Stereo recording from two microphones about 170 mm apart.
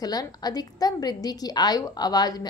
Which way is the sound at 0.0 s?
20° left (ahead or behind).